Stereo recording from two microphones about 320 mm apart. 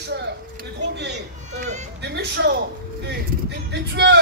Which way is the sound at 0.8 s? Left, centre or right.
Right.